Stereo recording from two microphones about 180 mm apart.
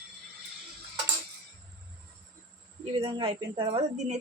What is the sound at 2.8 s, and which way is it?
Speech, 30° right (ahead or behind).